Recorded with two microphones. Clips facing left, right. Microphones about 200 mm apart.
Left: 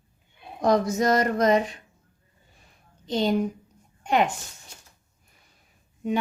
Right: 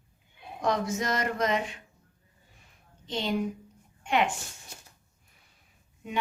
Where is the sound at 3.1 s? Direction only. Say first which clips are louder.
Left 8 dB; 40° left (ahead or behind).